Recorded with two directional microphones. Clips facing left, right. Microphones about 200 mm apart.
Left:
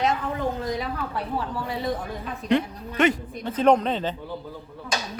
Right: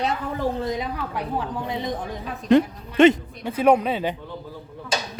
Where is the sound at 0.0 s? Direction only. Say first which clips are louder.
Even; 35° right (ahead or behind).